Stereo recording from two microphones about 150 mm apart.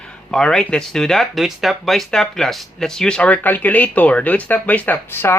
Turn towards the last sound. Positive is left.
turn(degrees=15)  # may be behind; listen again after turning